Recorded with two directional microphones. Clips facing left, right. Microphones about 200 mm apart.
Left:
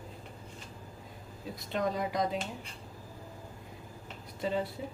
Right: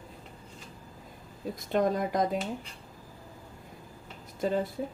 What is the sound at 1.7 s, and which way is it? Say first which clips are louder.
Speech: right 5 dB; 50° right (ahead or behind).